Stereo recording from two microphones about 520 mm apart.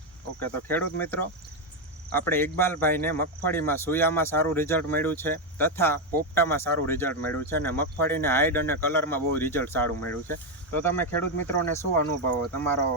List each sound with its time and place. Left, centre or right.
0.3 s speech: centre